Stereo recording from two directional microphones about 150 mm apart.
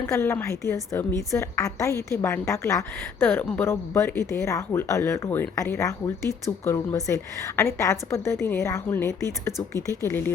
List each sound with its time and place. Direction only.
0.0 s a woman's voice: 20° left (ahead or behind)